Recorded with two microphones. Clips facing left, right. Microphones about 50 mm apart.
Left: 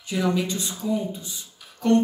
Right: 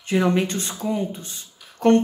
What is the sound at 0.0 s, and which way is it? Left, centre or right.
A woman's voice, right.